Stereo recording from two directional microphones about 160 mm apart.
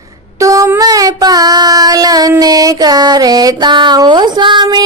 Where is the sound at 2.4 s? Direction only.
25° right (ahead or behind).